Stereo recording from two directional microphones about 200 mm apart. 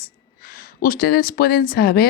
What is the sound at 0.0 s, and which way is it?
Speech, 45° left (ahead or behind).